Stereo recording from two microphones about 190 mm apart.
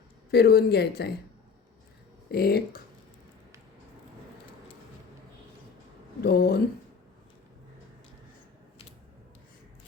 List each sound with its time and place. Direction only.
0.3 s speech: 60° left (ahead or behind)
2.3 s speech: 55° left (ahead or behind)
6.2 s speech: 55° left (ahead or behind)